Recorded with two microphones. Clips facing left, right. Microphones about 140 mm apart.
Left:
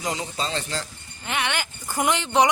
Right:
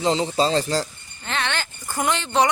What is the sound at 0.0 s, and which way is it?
Speech, 30° right (ahead or behind).